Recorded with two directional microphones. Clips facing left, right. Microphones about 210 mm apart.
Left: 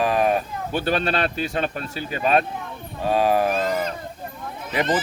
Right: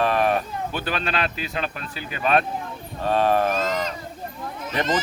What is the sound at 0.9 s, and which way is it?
Speech, 40° left (ahead or behind).